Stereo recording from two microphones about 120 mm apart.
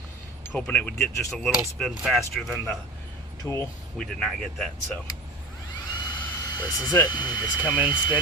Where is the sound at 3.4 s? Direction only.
15° left (ahead or behind).